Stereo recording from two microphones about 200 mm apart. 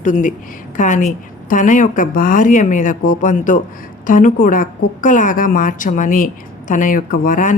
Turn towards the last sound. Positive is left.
turn(degrees=40)  # may be behind; listen again after turning